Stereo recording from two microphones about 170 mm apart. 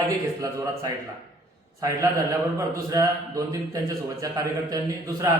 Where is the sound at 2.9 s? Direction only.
20° right (ahead or behind).